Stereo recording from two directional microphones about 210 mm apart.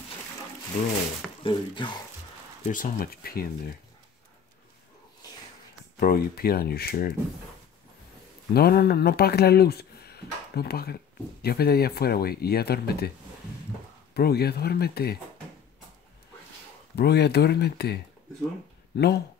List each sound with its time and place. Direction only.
1.4 s speech: 25° left (ahead or behind)
2.7 s speech: 40° left (ahead or behind)
5.9 s speech: 45° left (ahead or behind)
8.5 s speech: 50° left (ahead or behind)
14.1 s speech: 50° left (ahead or behind)
16.9 s speech: 50° left (ahead or behind)